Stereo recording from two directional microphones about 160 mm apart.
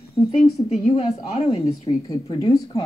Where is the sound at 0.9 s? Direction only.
40° left (ahead or behind).